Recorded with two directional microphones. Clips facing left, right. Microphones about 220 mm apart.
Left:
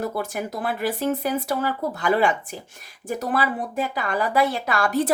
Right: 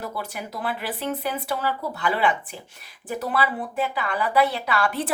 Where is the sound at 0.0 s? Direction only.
45° left (ahead or behind).